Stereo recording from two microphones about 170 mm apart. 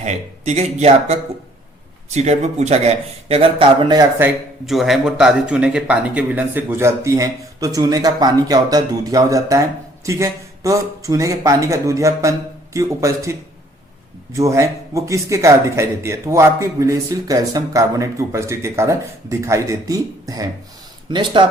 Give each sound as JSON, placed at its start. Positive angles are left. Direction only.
{"t": 0.0, "sound": "a man's voice", "side_deg": -40}
{"t": 4.6, "sound": "a man's voice", "side_deg": 0}
{"t": 14.3, "sound": "a man's voice", "side_deg": -20}